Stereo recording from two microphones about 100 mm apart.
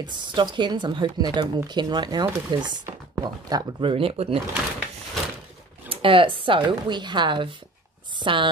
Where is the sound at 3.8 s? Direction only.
65° right (ahead or behind).